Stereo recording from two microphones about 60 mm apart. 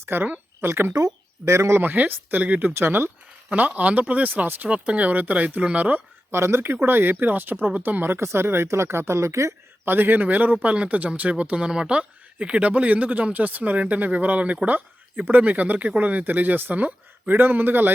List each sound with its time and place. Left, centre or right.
0.0 s speech: right
1.5 s speech: right
1.8 s speech: right
2.7 s speech: right
3.5 s speech: right
6.3 s speech: right
9.8 s speech: right